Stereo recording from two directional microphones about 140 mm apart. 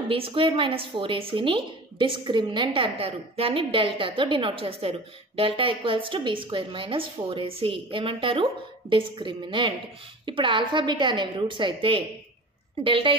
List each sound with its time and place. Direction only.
0.1 s a woman's voice: 40° right (ahead or behind)